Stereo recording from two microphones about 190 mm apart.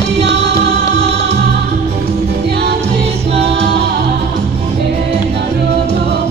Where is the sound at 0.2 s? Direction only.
65° right (ahead or behind).